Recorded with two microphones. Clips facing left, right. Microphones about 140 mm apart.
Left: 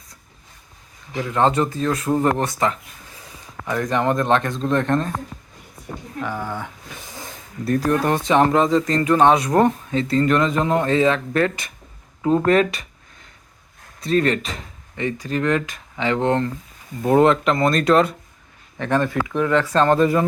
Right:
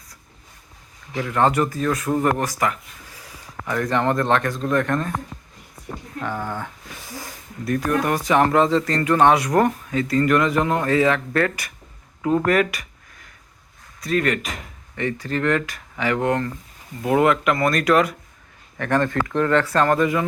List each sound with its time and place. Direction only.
1.1 s speech: 20° left (ahead or behind)
6.2 s speech: 10° left (ahead or behind)
7.1 s speech: 20° left (ahead or behind)
12.2 s a sound: 25° left (ahead or behind)
14.0 s speech: 30° left (ahead or behind)
18.8 s speech: 15° left (ahead or behind); by 20.2 s 30° left (ahead or behind)